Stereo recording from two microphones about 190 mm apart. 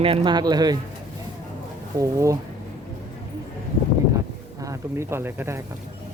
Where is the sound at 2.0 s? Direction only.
15° right (ahead or behind).